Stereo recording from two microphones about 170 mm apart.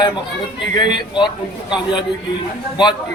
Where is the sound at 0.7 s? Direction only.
25° left (ahead or behind).